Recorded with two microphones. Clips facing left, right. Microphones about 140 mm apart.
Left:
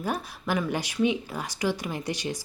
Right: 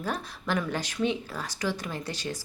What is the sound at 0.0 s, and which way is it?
Speech, 10° left (ahead or behind).